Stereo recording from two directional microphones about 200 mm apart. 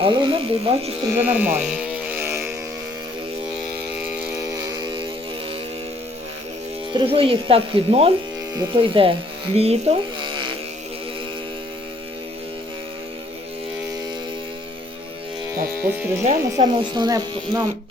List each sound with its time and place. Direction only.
0.0 s speech: 25° right (ahead or behind)
1.1 s speech: 10° right (ahead or behind)
2.0 s a sound: 10° right (ahead or behind)
6.9 s speech: 25° right (ahead or behind)
16.2 s speech: 35° right (ahead or behind)
16.9 s speech: 20° right (ahead or behind)